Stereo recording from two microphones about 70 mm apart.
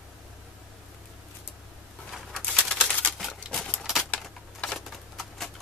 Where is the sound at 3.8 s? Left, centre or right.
Centre.